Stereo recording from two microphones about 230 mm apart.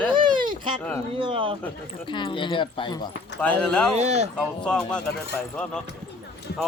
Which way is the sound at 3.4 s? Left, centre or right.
Centre.